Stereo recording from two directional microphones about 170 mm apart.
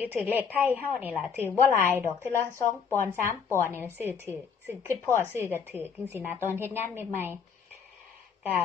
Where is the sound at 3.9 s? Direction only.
15° right (ahead or behind).